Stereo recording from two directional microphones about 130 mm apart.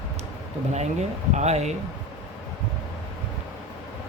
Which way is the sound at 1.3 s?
60° right (ahead or behind).